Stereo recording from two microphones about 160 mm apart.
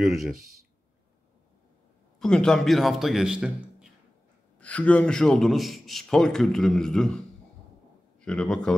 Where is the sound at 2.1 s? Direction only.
5° left (ahead or behind).